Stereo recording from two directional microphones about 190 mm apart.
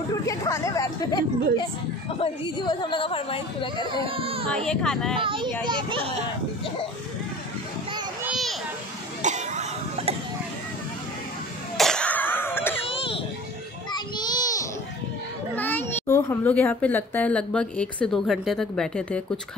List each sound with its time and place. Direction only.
0.1 s a child's voice: 15° left (ahead or behind)
2.0 s speech: 30° left (ahead or behind)
4.0 s speech: 30° right (ahead or behind)
4.6 s speech: 5° left (ahead or behind)
5.2 s speech: 25° right (ahead or behind)
9.2 s cough: 40° right (ahead or behind)
11.7 s a sound: centre (ahead or behind)
12.8 s children playing: 30° left (ahead or behind)
13.9 s child singing: 20° left (ahead or behind)
15.5 s a child's voice: 10° left (ahead or behind)